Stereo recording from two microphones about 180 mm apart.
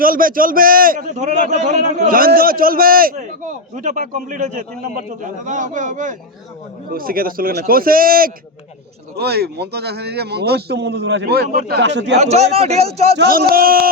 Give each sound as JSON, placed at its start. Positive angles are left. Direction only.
{"t": 0.0, "sound": "a man's voice", "side_deg": -50}
{"t": 9.1, "sound": "a man's voice", "side_deg": -65}
{"t": 12.1, "sound": "a man's voice", "side_deg": -35}
{"t": 13.1, "sound": "a man's voice", "side_deg": -60}